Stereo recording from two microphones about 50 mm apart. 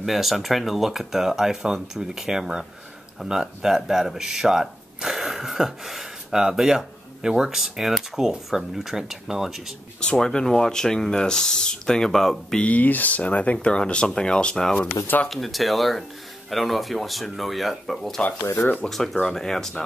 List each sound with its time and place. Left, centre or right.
0.0 s speech: centre
9.9 s speech: centre
12.5 s speech: left
15.2 s speech: centre